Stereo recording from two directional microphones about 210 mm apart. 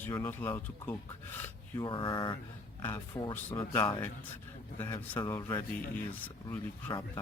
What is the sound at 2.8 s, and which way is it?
Speech, 10° left (ahead or behind).